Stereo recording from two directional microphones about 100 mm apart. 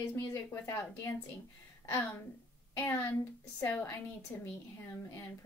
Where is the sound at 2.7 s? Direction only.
20° left (ahead or behind).